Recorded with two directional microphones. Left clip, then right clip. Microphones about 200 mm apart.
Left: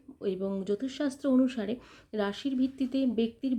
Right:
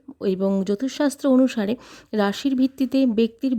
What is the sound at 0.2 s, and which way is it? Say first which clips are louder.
Speech: right 10 dB; 55° right (ahead or behind).